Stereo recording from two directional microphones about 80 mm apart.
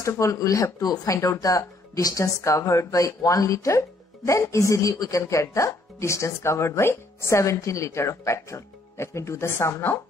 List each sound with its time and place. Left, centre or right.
0.0 s speech: left